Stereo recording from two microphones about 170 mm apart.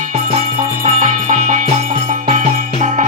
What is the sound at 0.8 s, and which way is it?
Music, 45° right (ahead or behind).